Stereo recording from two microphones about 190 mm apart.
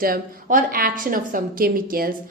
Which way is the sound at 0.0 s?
45° right (ahead or behind).